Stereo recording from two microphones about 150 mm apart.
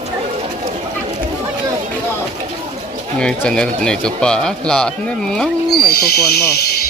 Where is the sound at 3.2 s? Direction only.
5° left (ahead or behind).